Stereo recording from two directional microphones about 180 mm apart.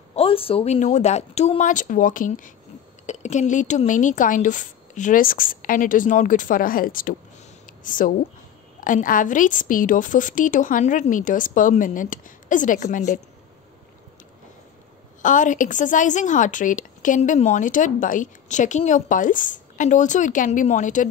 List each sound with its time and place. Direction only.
0.1 s a woman's voice: 30° left (ahead or behind)
15.2 s a woman's voice: 45° left (ahead or behind)